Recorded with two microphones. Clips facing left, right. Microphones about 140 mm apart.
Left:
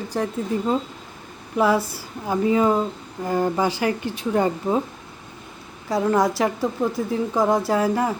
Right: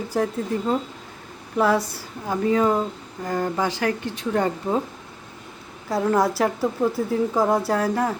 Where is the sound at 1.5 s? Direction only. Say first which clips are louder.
Left 1 dB; 5° left (ahead or behind).